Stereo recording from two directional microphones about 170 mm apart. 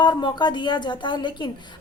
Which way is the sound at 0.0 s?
25° left (ahead or behind).